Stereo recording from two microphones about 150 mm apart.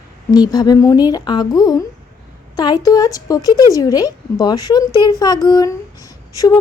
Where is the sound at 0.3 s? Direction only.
25° left (ahead or behind).